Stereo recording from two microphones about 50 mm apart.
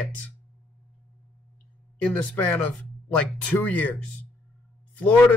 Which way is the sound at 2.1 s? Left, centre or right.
Left.